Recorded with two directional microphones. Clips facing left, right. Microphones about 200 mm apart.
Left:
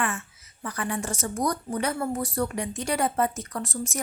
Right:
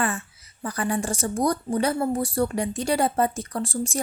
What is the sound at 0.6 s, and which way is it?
Speech, 35° right (ahead or behind).